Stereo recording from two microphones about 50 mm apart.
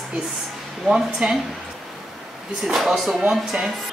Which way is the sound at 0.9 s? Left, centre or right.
Centre.